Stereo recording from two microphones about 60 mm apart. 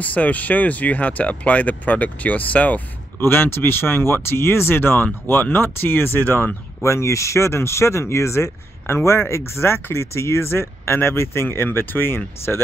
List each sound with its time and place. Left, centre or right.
0.0 s speech: left
3.3 s speech: left
6.8 s speech: left